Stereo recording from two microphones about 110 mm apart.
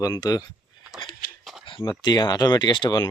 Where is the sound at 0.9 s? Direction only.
5° right (ahead or behind).